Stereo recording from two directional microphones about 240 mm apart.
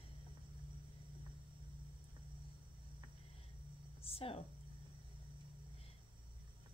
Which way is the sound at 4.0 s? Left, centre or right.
Left.